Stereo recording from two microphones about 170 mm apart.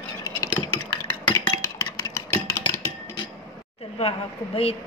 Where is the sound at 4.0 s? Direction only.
35° left (ahead or behind).